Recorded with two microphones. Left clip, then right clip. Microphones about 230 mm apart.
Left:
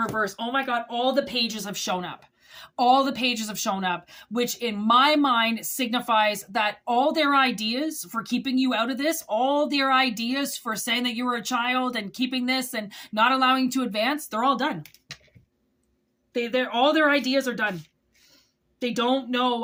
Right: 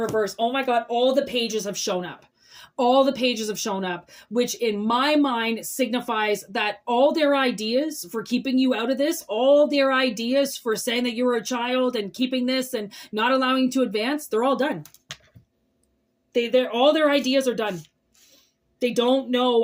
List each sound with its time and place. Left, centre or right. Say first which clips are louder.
0.2 s speech: right 3 dB; centre
16.3 s speech: right 4 dB; centre
18.9 s speech: right 3 dB; centre